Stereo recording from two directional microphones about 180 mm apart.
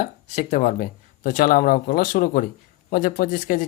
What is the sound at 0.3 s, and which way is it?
Speech, 45° left (ahead or behind).